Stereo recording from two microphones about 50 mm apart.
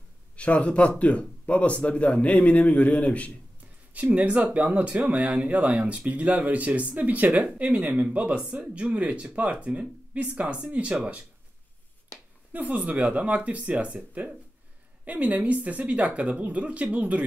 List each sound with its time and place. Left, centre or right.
0.4 s speech: left
3.9 s speech: right
12.5 s speech: right